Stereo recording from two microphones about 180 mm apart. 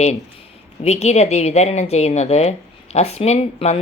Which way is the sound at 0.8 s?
35° left (ahead or behind).